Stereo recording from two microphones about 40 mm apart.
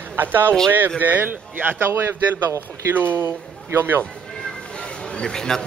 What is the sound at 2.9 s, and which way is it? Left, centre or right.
Speech, right.